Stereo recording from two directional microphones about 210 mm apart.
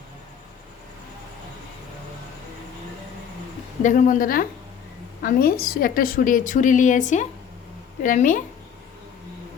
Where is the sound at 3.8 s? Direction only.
40° left (ahead or behind).